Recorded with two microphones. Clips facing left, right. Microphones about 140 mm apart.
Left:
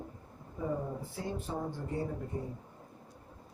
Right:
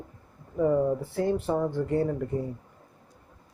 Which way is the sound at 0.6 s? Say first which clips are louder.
Right 12 dB; 70° right (ahead or behind).